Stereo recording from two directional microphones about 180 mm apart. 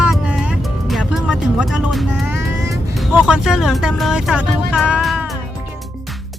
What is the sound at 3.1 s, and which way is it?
Speech, 5° right (ahead or behind).